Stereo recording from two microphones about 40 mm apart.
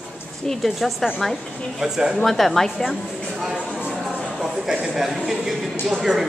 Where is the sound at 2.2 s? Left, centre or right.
Centre.